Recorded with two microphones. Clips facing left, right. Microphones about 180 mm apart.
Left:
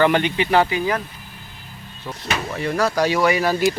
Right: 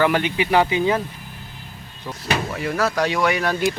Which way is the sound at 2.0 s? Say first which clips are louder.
Right 2 dB; centre (ahead or behind).